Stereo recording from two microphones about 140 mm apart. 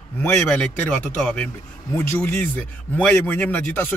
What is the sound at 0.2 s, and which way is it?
Speech, 10° left (ahead or behind).